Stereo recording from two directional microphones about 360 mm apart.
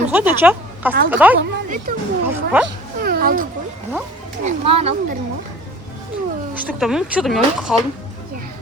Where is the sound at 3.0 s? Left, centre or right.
Right.